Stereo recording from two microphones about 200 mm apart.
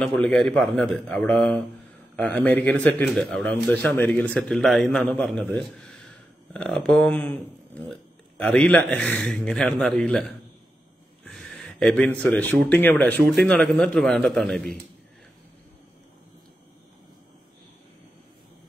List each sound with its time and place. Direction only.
0.0 s a man's voice: 5° left (ahead or behind)
11.2 s a sound: centre (ahead or behind)
12.6 s speech: 10° left (ahead or behind)